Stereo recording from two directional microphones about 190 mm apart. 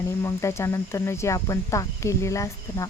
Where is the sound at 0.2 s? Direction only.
15° left (ahead or behind).